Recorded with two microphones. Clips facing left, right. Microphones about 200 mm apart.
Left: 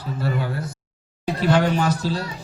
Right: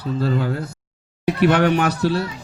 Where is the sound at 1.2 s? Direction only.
65° right (ahead or behind).